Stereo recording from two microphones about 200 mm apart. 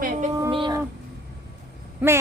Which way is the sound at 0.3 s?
20° right (ahead or behind).